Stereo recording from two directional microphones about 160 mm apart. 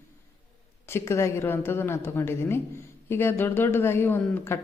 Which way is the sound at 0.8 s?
15° left (ahead or behind).